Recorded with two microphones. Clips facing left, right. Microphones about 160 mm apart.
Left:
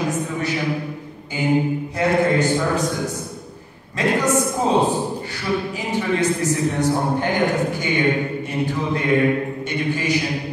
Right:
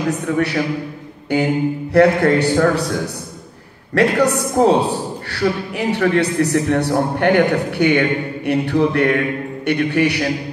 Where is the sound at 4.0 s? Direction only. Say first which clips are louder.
Right 4 dB; 70° right (ahead or behind).